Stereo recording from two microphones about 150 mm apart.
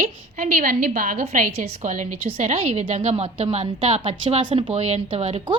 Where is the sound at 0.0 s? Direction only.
60° right (ahead or behind).